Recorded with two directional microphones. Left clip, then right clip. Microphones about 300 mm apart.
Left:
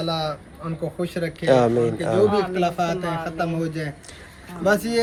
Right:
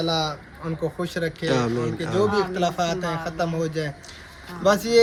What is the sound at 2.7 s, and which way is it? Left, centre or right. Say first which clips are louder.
Speech: left 1 dB; centre.